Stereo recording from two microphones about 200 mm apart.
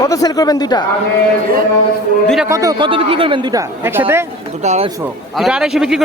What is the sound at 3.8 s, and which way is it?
Speech, 10° right (ahead or behind).